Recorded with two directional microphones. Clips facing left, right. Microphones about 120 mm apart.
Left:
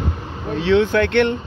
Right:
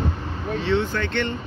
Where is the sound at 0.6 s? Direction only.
80° left; by 1.3 s 65° left (ahead or behind).